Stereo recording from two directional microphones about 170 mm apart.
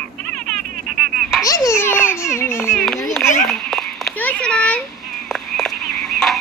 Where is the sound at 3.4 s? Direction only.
Centre (ahead or behind).